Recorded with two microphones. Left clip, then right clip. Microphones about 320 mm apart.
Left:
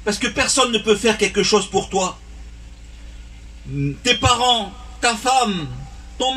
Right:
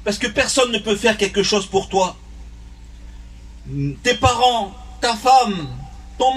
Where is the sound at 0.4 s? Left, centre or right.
Right.